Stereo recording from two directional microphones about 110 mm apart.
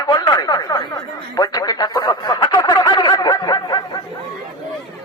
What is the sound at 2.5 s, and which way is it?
Snicker, 35° left (ahead or behind).